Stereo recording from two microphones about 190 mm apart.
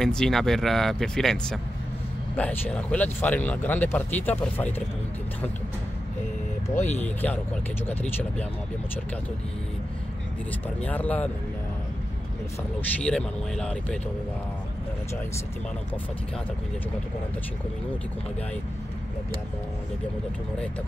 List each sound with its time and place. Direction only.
0.0 s speech: 5° left (ahead or behind)
6.9 s speech: 10° left (ahead or behind)
10.8 s speech: 10° left (ahead or behind)
13.0 s speech: 5° left (ahead or behind)